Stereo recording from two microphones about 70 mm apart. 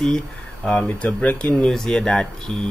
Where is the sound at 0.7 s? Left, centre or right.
Centre.